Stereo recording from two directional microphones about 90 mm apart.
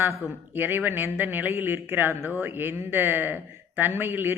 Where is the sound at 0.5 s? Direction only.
20° right (ahead or behind).